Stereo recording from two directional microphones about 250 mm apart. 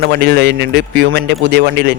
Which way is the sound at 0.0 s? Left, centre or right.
Right.